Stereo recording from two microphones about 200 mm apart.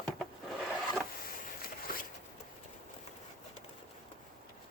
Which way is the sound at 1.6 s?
45° left (ahead or behind).